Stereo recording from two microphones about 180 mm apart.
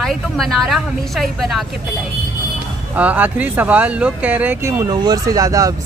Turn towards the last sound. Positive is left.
turn(degrees=-20)  # may be behind; listen again after turning